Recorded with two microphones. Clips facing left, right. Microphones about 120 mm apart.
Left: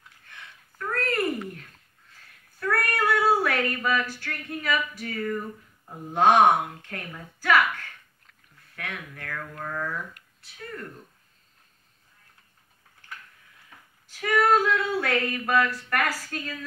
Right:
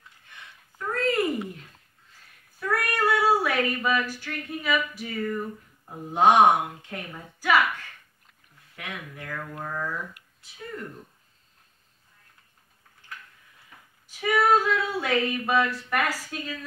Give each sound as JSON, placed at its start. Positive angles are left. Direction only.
{"t": 1.0, "sound": "a sound", "side_deg": -15}
{"t": 2.6, "sound": "female singing", "side_deg": -10}
{"t": 8.7, "sound": "female singing", "side_deg": -15}
{"t": 14.2, "sound": "female singing", "side_deg": -10}